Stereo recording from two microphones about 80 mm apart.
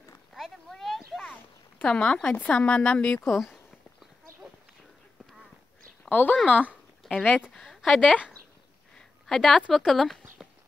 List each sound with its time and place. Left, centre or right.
0.3 s a sound: centre
1.8 s speech: centre
6.0 s speech: left
7.6 s speech: centre
8.9 s a sound: centre
9.6 s speech: centre